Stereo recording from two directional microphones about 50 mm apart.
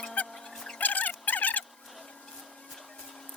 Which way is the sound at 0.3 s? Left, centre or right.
Centre.